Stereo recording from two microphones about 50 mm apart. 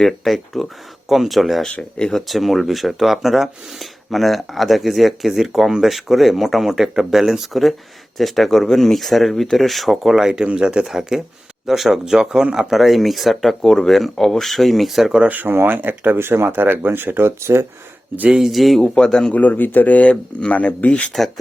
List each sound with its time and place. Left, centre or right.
0.0 s speech: centre
2.0 s speech: centre
2.2 s speech: centre
12.7 s speech: centre
15.3 s speech: right
15.5 s speech: right
17.4 s speech: right
18.3 s speech: centre
18.8 s speech: centre
19.3 s speech: left